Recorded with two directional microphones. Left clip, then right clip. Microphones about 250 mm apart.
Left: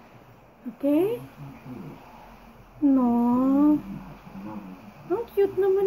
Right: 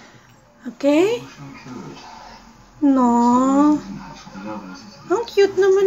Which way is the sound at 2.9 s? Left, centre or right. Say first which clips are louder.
Right 11 dB; centre.